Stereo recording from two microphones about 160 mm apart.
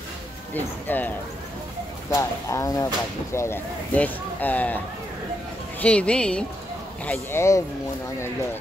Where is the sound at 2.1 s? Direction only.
20° left (ahead or behind).